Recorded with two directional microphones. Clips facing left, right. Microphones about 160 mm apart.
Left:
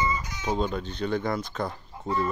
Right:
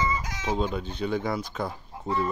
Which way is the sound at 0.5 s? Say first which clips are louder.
Even; 5° right (ahead or behind).